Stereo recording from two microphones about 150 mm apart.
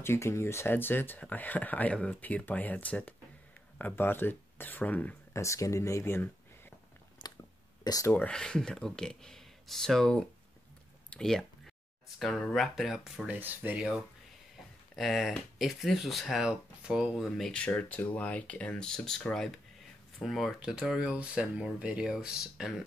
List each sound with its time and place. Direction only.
0.0 s speech: 15° left (ahead or behind)
7.2 s a sound: 30° left (ahead or behind)
7.8 s speech: 25° left (ahead or behind)
8.1 s speech: 10° left (ahead or behind)
11.1 s a sound: 5° left (ahead or behind)
12.2 s speech: 5° left (ahead or behind)